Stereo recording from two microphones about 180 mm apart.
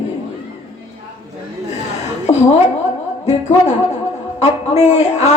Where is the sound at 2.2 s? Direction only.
40° left (ahead or behind).